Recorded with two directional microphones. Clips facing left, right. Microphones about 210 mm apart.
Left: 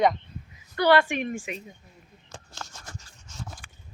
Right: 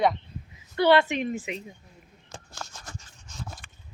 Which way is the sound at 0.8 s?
20° right (ahead or behind).